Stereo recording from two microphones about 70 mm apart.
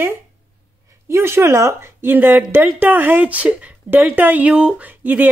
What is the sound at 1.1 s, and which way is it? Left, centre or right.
Speech, right.